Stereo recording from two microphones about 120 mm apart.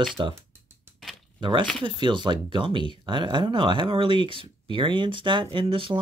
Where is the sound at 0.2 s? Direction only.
40° right (ahead or behind).